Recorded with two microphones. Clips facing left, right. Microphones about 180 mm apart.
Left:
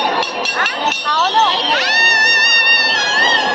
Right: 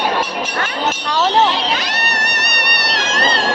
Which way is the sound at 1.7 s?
75° left (ahead or behind).